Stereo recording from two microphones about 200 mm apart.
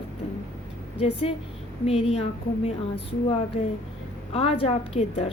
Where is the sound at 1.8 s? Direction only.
30° left (ahead or behind).